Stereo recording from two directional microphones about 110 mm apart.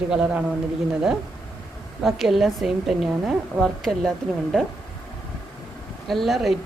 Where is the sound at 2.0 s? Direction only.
Centre (ahead or behind).